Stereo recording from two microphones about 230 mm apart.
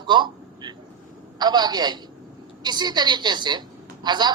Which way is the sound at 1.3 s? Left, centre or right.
Centre.